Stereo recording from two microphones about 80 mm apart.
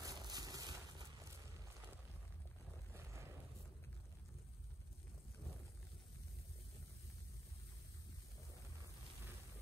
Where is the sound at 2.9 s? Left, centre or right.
Right.